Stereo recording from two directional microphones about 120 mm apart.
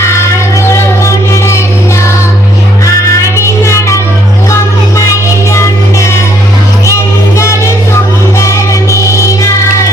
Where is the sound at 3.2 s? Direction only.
25° left (ahead or behind).